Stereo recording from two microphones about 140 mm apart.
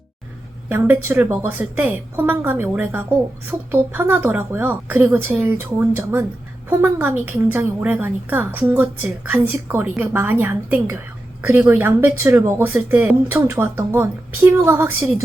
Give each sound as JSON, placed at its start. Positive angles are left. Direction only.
{"t": 0.7, "sound": "speech", "side_deg": -15}